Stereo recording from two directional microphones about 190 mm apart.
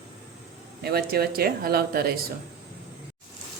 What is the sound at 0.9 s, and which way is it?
Speech, 55° right (ahead or behind).